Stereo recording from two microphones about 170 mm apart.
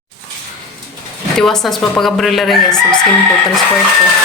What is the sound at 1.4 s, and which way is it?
Speech, centre (ahead or behind).